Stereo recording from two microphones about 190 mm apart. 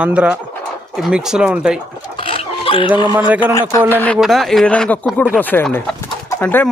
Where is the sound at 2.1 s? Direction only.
30° left (ahead or behind).